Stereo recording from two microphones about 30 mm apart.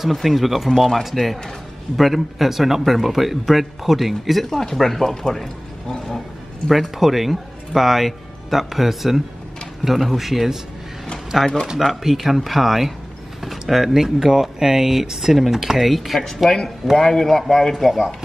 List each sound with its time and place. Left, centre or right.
0.1 s speech: centre
2.0 s speech: centre
4.5 s a man's voice: centre
5.3 s a sound: centre
7.0 s speech: centre
16.4 s speech: left
16.9 s a man's voice: centre
17.7 s speech: centre